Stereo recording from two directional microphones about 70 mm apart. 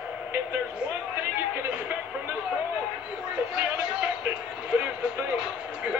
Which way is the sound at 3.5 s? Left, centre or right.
Centre.